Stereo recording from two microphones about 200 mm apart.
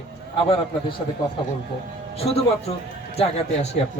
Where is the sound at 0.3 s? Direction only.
25° left (ahead or behind).